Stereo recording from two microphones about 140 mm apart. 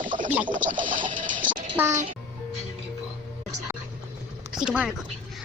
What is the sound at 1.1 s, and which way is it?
Music, 70° right (ahead or behind).